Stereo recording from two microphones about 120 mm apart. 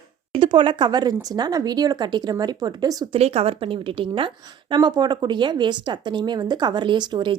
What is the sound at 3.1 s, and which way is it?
A woman's voice, 55° right (ahead or behind).